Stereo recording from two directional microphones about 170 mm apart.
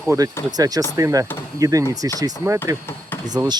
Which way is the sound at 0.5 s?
20° right (ahead or behind).